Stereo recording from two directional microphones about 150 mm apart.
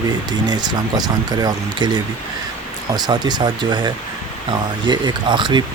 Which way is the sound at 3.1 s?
25° right (ahead or behind).